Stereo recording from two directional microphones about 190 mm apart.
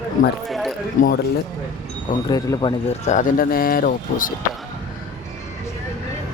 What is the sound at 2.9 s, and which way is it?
Speech, 40° left (ahead or behind).